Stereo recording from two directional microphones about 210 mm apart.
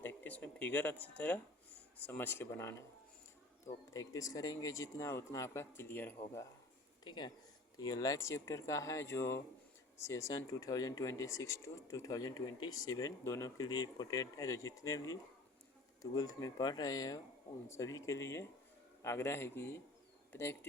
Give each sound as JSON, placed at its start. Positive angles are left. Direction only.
{"t": 0.0, "sound": "speech", "side_deg": 10}
{"t": 3.9, "sound": "speech", "side_deg": 15}